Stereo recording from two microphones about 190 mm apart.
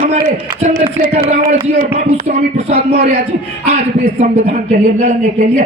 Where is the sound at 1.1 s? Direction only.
35° right (ahead or behind).